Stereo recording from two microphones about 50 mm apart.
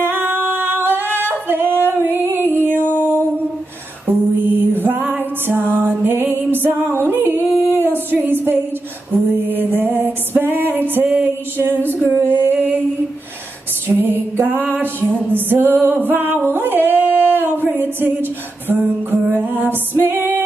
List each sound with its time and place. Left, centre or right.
0.0 s singing: right
2.2 s music: right
4.1 s music: right
12.3 s a sound: right
13.8 s music: right
16.5 s a sound: right